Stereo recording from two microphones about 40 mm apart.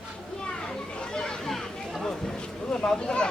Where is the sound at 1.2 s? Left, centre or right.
Centre.